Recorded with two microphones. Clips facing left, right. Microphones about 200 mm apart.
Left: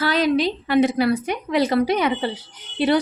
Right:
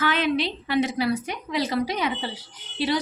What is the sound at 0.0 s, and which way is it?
A woman's voice, 40° left (ahead or behind).